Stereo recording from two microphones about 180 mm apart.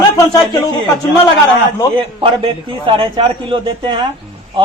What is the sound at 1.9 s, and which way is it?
A man's voice, 30° right (ahead or behind).